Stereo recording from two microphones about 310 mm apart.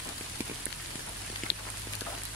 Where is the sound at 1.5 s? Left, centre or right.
Left.